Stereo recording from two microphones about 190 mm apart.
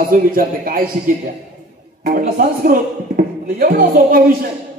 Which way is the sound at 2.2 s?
45° right (ahead or behind).